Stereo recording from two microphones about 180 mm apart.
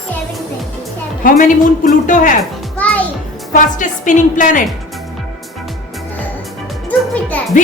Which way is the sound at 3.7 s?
45° left (ahead or behind).